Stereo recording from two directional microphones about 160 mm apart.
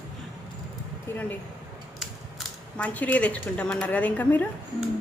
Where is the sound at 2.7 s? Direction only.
10° left (ahead or behind).